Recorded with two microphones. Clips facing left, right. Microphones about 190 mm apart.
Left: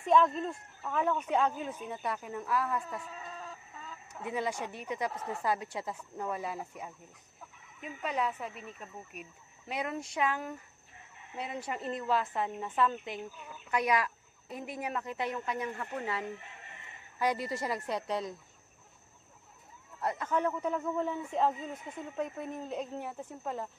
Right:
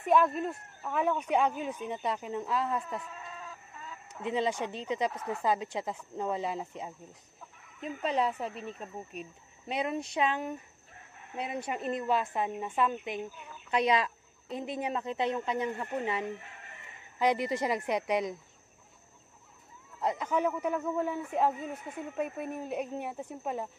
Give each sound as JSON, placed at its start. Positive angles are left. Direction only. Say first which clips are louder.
{"t": 0.0, "sound": "speech", "louder": "even", "side_deg": -5}
{"t": 4.1, "sound": "speech", "louder": "right 4 dB", "side_deg": -25}
{"t": 20.0, "sound": "speech", "louder": "right 2 dB", "side_deg": -15}